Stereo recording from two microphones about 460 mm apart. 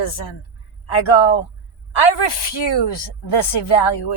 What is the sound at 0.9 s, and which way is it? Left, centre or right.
A woman's voice, left.